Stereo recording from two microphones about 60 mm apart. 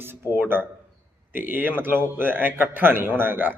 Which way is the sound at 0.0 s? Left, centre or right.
Right.